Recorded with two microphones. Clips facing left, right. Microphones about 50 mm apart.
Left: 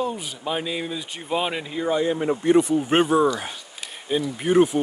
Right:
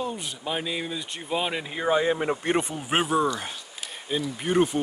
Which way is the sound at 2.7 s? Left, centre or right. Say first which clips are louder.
Left 6 dB; centre.